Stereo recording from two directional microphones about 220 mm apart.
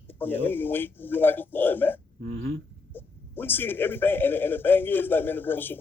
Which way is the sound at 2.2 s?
45° right (ahead or behind).